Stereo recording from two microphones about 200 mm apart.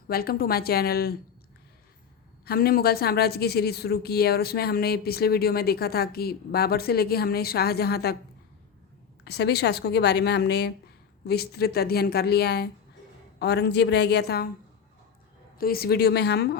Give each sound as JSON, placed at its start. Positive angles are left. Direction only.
{"t": 0.1, "sound": "a woman's voice", "side_deg": 50}
{"t": 2.4, "sound": "a woman's voice", "side_deg": 50}
{"t": 9.2, "sound": "a woman's voice", "side_deg": 55}
{"t": 15.5, "sound": "a woman's voice", "side_deg": 50}